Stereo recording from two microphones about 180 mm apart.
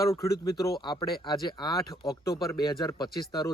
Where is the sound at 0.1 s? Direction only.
15° left (ahead or behind).